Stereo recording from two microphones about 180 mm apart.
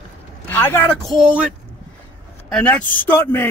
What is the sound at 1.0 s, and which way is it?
Speech, 5° right (ahead or behind).